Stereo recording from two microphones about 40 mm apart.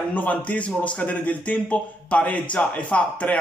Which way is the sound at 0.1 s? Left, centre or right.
Left.